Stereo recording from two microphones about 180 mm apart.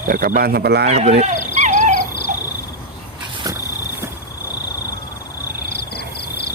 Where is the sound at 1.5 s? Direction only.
40° right (ahead or behind).